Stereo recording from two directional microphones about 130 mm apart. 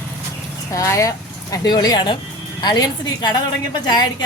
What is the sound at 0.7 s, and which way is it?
A woman's voice, 25° left (ahead or behind).